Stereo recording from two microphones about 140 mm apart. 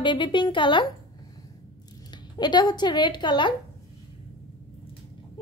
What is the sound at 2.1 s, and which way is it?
Speech, 30° left (ahead or behind).